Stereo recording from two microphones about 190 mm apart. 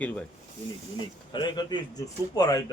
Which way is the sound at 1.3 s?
25° left (ahead or behind).